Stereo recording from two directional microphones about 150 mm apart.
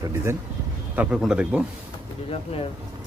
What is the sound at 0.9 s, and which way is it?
Speech, 5° right (ahead or behind).